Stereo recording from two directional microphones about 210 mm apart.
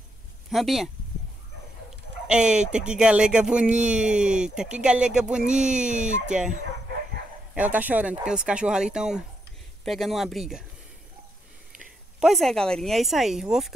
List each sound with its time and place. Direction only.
0.5 s speech: centre (ahead or behind)
2.2 s speech: 5° right (ahead or behind)
5.9 s speech: 35° right (ahead or behind)
7.5 s speech: 5° right (ahead or behind)
12.2 s speech: centre (ahead or behind)